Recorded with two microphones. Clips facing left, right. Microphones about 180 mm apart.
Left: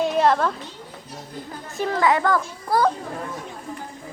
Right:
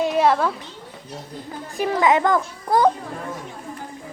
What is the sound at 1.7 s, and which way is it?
A child's voice, 15° right (ahead or behind).